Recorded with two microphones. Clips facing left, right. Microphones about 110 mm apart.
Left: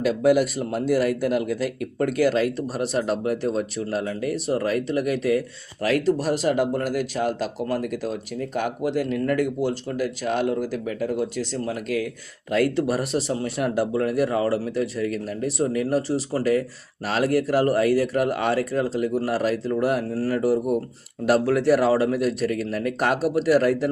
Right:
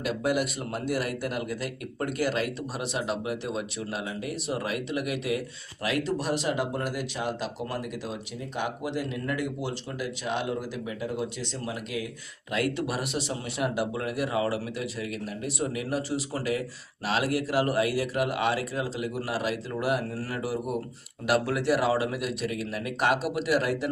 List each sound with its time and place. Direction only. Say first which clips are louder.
0.3 s speech: left 9 dB; 45° left (ahead or behind)